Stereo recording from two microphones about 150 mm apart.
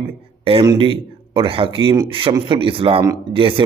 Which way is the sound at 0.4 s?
40° right (ahead or behind).